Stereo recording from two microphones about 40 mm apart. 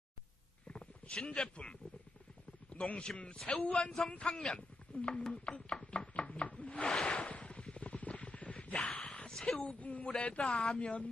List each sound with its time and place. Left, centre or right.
0.7 s a man's voice: left
3.3 s speech: centre
3.6 s speech: left
5.4 s chopping: left
9.0 s a sound: left
9.6 s speech: left